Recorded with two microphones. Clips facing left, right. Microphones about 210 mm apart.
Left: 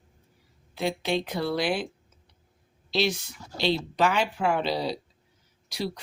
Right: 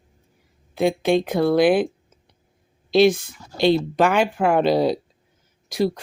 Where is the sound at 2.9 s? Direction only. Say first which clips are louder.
Right 11 dB; 50° right (ahead or behind).